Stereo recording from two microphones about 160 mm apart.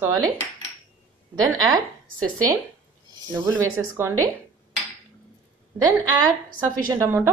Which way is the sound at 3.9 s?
15° right (ahead or behind).